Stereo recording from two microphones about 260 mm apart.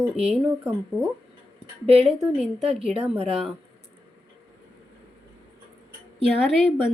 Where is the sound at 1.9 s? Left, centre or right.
Right.